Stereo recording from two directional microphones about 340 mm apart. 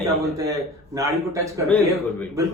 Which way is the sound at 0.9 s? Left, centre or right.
Centre.